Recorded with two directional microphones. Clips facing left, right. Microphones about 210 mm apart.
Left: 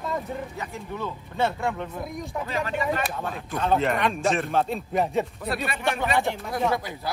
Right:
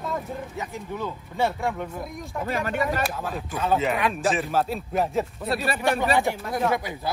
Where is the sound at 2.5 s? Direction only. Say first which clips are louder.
Right 2 dB; 50° right (ahead or behind).